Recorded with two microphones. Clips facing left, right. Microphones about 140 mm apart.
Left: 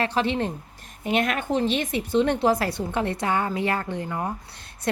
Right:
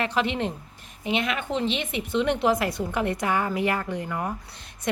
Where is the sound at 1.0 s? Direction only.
50° left (ahead or behind); by 4.3 s 20° left (ahead or behind).